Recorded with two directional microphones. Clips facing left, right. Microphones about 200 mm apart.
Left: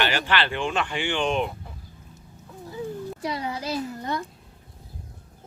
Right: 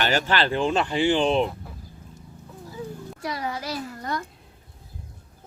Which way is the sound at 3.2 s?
25° left (ahead or behind).